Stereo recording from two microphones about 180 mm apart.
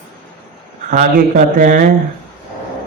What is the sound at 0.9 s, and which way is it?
Speech, 45° right (ahead or behind).